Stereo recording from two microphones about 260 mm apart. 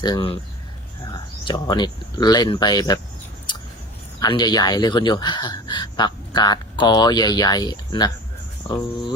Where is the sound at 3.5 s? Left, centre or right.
Centre.